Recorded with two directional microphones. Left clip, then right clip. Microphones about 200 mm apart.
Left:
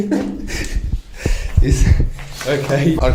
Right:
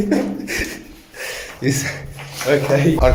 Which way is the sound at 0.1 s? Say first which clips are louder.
Right 1 dB; centre (ahead or behind).